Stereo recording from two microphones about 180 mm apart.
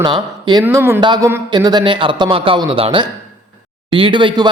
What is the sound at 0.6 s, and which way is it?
Speech, 15° right (ahead or behind).